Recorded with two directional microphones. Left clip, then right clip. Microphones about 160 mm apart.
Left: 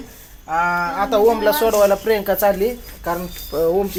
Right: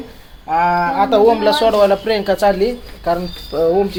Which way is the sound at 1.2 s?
40° left (ahead or behind).